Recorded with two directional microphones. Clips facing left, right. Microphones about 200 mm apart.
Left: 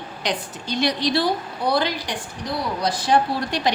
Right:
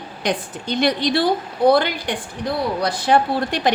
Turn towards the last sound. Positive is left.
turn(degrees=-55)  # may be behind; listen again after turning